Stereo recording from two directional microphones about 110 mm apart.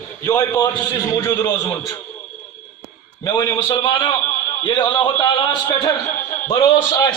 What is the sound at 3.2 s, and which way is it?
A man's voice, 35° left (ahead or behind).